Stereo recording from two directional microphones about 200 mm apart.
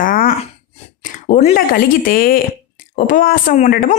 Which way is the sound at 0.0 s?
45° left (ahead or behind).